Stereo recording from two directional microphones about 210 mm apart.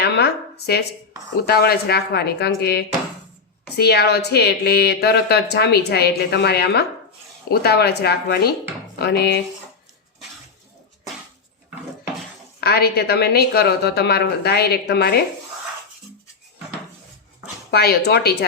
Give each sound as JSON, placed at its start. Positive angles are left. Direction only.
{"t": 0.0, "sound": "a woman's voice", "side_deg": 50}
{"t": 12.5, "sound": "a woman's voice", "side_deg": 50}
{"t": 17.7, "sound": "a woman's voice", "side_deg": 50}